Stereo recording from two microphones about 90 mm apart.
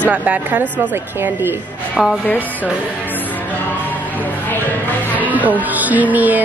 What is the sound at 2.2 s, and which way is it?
Speech, 20° left (ahead or behind).